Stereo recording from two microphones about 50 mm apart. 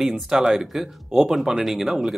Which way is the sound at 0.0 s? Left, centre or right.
Centre.